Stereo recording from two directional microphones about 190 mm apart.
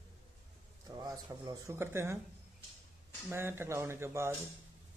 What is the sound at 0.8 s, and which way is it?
A man's voice, 20° right (ahead or behind).